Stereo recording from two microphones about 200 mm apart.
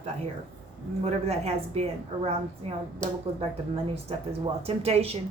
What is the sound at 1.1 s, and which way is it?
A woman's voice, 30° right (ahead or behind).